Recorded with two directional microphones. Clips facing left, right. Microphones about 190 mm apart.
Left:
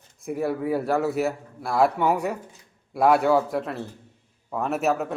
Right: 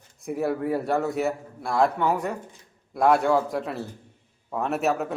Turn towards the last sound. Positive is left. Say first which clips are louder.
# left 1 dB
turn(degrees=0)  # may be behind; listen again after turning